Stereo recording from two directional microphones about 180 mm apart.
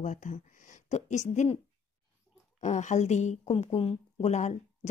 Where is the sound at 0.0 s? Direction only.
45° left (ahead or behind).